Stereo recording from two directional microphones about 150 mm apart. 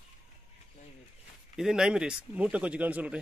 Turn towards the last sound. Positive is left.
turn(degrees=-10)  # may be behind; listen again after turning